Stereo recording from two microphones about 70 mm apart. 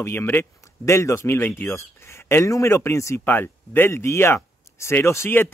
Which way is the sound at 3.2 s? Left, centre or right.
Left.